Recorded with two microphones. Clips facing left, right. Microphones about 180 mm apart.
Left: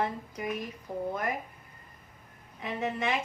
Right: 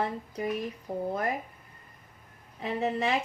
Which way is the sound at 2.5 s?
35° right (ahead or behind).